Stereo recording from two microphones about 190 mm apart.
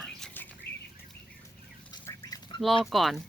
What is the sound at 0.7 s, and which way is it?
Bird flight, 55° left (ahead or behind).